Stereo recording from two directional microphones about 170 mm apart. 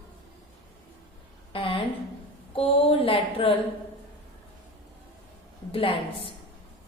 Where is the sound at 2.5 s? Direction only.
35° left (ahead or behind).